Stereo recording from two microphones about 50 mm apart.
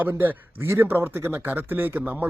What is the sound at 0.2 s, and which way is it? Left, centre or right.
Speech, right.